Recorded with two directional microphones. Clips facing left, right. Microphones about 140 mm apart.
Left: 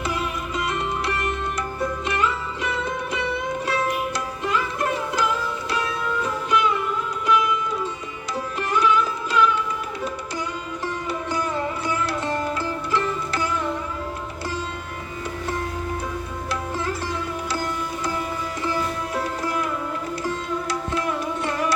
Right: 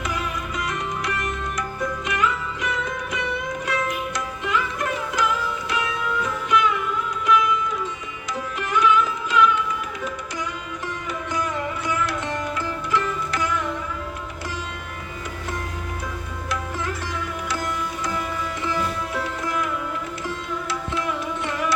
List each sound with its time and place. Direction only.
0.1 s music: 30° left (ahead or behind)
8.7 s music: 35° left (ahead or behind)
11.3 s music: 30° left (ahead or behind)
17.5 s music: 30° left (ahead or behind)